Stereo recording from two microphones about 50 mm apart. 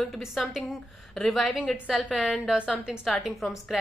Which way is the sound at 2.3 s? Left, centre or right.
Centre.